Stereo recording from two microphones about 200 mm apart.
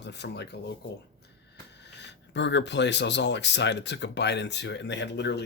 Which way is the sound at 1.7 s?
60° left (ahead or behind).